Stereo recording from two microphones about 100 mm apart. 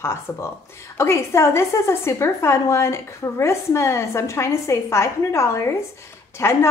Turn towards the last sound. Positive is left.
turn(degrees=25)  # may be behind; listen again after turning